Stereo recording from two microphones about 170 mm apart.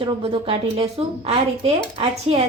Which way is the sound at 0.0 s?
35° right (ahead or behind).